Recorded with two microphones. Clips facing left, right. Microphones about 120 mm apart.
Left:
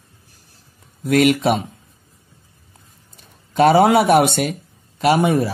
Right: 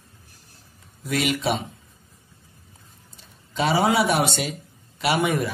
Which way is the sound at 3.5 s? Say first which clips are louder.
Left 8 dB; 55° left (ahead or behind).